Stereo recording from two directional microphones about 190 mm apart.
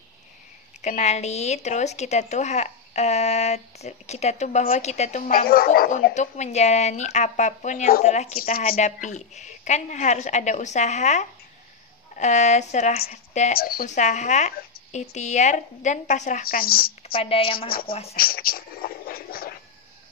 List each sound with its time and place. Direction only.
0.8 s a woman's voice: 35° left (ahead or behind); by 5.9 s 50° left (ahead or behind)
6.1 s a woman's voice: 40° left (ahead or behind)
13.6 s a woman's voice: 50° left (ahead or behind)
17.1 s a woman's voice: 30° left (ahead or behind)
17.6 s a woman's voice: 50° left (ahead or behind)